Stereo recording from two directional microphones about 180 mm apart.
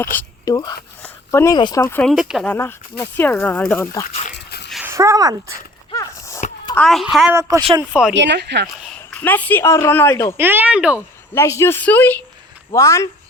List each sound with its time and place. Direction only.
0.0 s speech: 10° left (ahead or behind)
0.5 s speech: 25° left (ahead or behind)
2.0 s a woman's voice: centre (ahead or behind)
2.5 s speech: 10° left (ahead or behind)
4.4 s dog: 70° left (ahead or behind)
4.9 s speech: 15° right (ahead or behind)
5.9 s a sound: 15° left (ahead or behind)
6.7 s a woman's voice: centre (ahead or behind)
8.1 s speech: 75° right (ahead or behind)
8.9 s speech: 10° left (ahead or behind)
10.3 s speech: 10° right (ahead or behind)
11.3 s speech: 15° left (ahead or behind)